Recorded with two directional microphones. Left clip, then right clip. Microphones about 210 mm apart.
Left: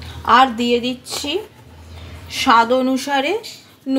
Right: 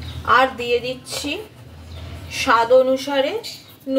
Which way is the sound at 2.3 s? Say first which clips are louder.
Left 1 dB; 45° left (ahead or behind).